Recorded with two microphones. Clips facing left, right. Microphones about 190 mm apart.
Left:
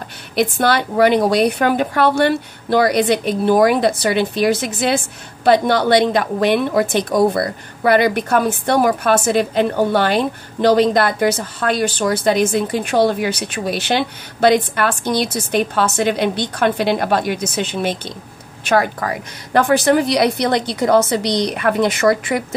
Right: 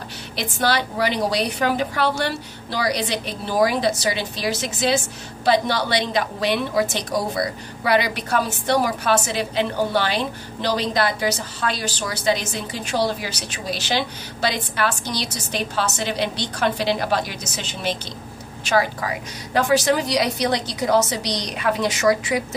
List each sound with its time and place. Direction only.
0.4 s a woman's voice: 55° left (ahead or behind)